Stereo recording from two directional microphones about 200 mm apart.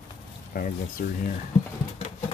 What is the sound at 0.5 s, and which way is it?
Speech, 45° left (ahead or behind).